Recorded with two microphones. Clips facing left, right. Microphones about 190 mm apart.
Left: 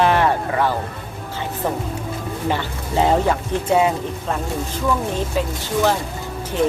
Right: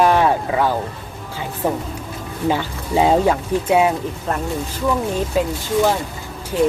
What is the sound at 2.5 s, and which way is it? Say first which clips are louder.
Speech: right 3 dB; 10° right (ahead or behind).